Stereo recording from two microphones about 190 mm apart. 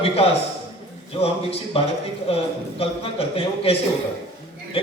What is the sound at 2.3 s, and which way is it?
A man's voice, 30° left (ahead or behind).